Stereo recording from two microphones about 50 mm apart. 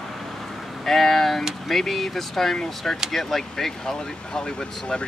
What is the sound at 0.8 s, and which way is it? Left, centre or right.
Speech, centre.